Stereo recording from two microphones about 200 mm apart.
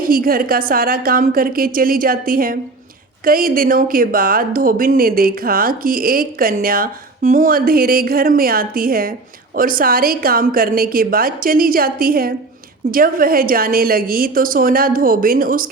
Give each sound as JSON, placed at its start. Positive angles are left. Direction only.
{"t": 0.0, "sound": "speech", "side_deg": -45}